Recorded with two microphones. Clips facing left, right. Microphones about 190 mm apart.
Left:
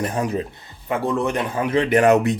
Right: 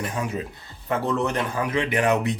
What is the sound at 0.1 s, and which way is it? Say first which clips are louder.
Speech: left 5 dB; 40° left (ahead or behind).